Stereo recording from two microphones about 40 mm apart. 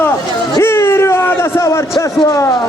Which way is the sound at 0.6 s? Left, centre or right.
Left.